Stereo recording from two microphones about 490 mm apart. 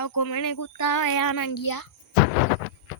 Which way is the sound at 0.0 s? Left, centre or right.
Left.